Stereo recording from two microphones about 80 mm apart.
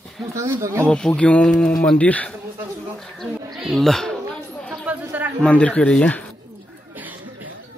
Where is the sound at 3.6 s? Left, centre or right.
Centre.